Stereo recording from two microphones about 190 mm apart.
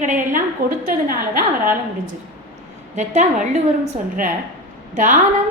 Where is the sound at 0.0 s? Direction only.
40° right (ahead or behind).